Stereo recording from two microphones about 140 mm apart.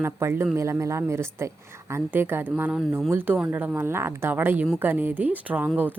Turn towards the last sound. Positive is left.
turn(degrees=-15)  # may be behind; listen again after turning